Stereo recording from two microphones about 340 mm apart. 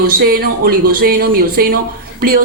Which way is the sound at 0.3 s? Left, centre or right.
Right.